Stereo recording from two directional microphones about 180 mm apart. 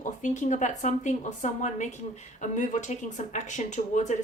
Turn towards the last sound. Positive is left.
turn(degrees=40)  # may be behind; listen again after turning